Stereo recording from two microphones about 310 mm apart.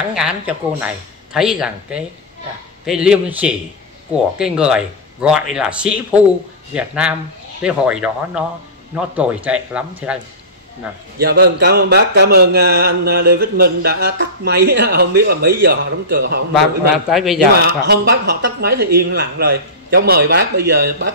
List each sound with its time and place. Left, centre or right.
0.1 s speech: centre
11.1 s speech: right
16.5 s speech: centre
17.6 s speech: right